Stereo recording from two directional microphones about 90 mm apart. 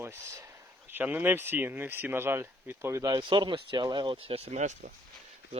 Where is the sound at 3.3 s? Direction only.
65° right (ahead or behind); by 4.5 s 90° right.